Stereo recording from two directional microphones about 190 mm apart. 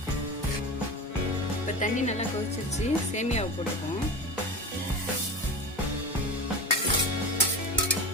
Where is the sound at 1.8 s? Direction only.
40° left (ahead or behind).